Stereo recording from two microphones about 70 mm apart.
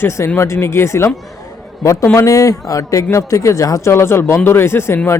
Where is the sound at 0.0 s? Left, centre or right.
Left.